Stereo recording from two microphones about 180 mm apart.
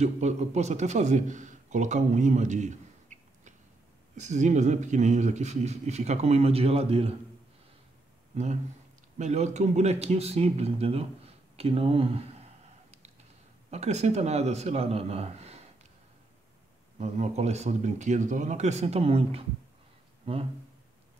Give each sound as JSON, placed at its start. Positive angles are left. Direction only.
{"t": 0.0, "sound": "a man's voice", "side_deg": -40}
{"t": 9.2, "sound": "speech", "side_deg": -40}
{"t": 13.7, "sound": "a man's voice", "side_deg": -35}
{"t": 17.0, "sound": "speech", "side_deg": -40}